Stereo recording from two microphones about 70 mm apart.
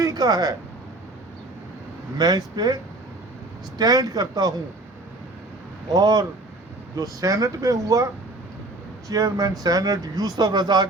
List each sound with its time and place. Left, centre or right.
0.0 s a sound: right
2.1 s speech: right
3.8 s speech: right
5.9 s speech: right
6.9 s speech: right